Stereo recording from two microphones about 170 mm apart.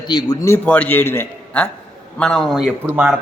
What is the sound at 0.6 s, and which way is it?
A man's voice, 10° left (ahead or behind).